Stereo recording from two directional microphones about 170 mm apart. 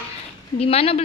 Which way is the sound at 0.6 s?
35° left (ahead or behind).